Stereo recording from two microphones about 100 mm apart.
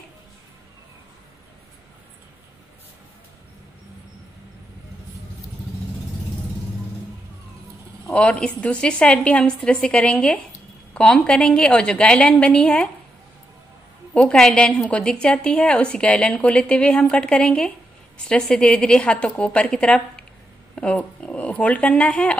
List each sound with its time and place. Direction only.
8.1 s a woman's voice: 10° left (ahead or behind)
14.1 s a woman's voice: 5° left (ahead or behind)